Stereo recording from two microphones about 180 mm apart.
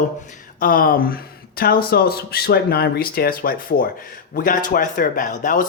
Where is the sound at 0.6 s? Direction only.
50° left (ahead or behind).